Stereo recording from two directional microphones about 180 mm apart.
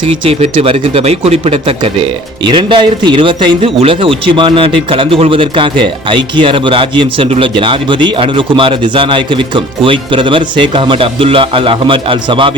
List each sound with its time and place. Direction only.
0.3 s speech: 35° right (ahead or behind)